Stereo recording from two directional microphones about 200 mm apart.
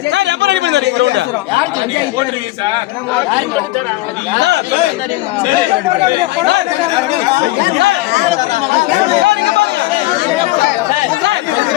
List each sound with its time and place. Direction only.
0.1 s a sound: 60° right (ahead or behind)
4.4 s speech: 60° right (ahead or behind)
9.2 s speech: 60° right (ahead or behind)